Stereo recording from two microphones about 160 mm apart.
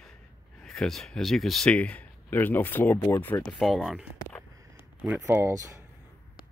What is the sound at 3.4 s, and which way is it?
Speech, 5° left (ahead or behind).